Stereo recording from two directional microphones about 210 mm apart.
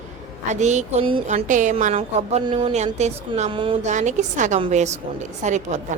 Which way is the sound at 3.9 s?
35° right (ahead or behind).